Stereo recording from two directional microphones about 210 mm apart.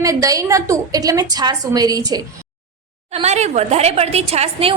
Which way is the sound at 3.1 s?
30° right (ahead or behind).